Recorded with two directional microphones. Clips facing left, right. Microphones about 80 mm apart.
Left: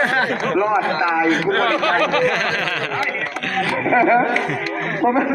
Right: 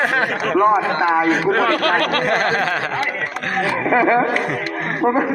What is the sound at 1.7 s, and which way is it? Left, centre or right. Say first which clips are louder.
Speech: even; right.